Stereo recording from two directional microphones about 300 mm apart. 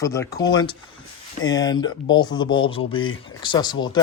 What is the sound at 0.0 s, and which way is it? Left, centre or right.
Speech, centre.